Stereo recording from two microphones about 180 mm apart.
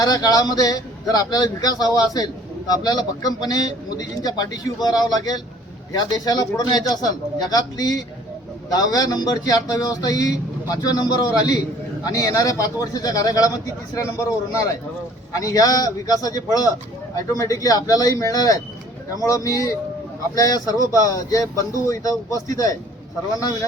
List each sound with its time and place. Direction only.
0.0 s a man's voice: 20° left (ahead or behind)